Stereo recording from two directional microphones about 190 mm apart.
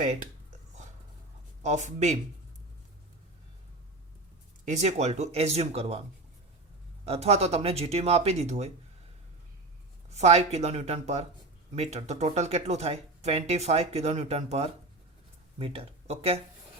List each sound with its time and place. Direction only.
0.0 s speech: 40° right (ahead or behind)
1.6 s speech: 40° right (ahead or behind)
4.6 s speech: 35° right (ahead or behind)
7.0 s speech: 30° right (ahead or behind)
10.1 s speech: 35° right (ahead or behind)